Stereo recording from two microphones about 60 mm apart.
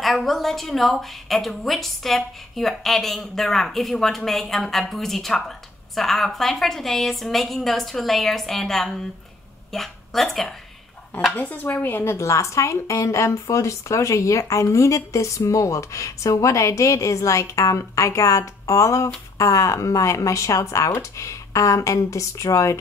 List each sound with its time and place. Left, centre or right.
0.0 s a woman's voice: centre
11.3 s speech: left